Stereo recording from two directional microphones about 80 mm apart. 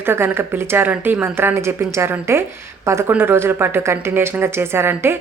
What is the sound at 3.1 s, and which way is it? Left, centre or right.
A woman's voice, right.